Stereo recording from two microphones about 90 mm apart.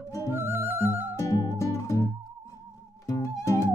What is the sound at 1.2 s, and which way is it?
Music, 45° left (ahead or behind).